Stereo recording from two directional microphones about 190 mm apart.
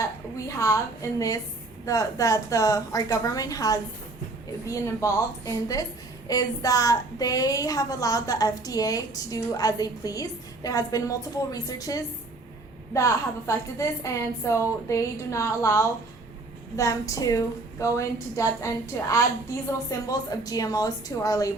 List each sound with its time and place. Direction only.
0.3 s a woman's voice: 15° left (ahead or behind)